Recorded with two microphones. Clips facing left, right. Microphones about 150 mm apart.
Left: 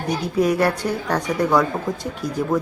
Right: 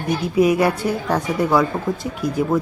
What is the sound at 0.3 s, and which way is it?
Speech, 10° right (ahead or behind).